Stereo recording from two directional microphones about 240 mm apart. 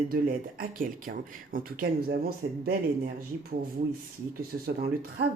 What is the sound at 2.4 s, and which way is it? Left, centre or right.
Speech, right.